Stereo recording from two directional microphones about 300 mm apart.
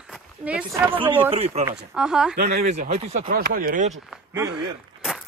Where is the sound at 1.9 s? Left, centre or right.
Centre.